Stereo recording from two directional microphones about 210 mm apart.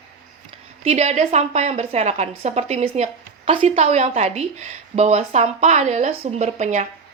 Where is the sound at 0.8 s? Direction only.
30° right (ahead or behind).